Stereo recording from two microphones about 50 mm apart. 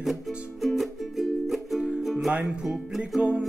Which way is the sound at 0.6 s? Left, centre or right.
Centre.